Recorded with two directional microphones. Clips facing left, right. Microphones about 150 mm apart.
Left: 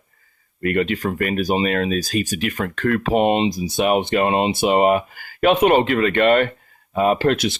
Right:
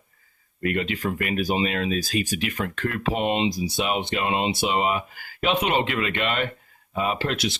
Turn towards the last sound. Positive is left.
turn(degrees=50)  # may be behind; listen again after turning